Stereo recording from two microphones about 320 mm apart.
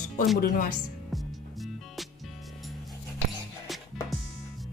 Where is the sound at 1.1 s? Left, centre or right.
Centre.